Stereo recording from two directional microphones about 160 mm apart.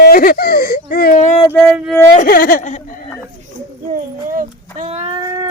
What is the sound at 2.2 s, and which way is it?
Speech, 65° left (ahead or behind).